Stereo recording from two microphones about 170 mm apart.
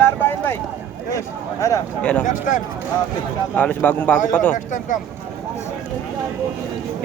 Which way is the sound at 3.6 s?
10° left (ahead or behind).